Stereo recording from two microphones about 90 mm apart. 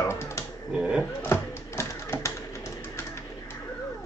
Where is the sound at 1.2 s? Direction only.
30° left (ahead or behind).